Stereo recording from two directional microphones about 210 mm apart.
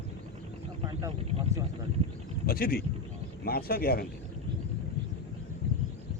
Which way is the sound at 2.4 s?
45° left (ahead or behind).